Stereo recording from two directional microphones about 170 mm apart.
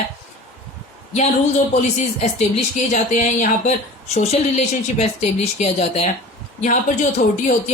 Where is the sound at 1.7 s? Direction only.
40° left (ahead or behind).